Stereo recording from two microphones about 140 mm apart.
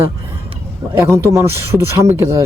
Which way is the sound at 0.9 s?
15° right (ahead or behind).